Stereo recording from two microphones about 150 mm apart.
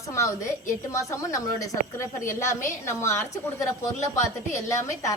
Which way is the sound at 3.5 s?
20° left (ahead or behind).